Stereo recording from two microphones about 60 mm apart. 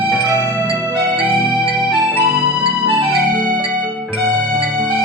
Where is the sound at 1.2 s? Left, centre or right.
Centre.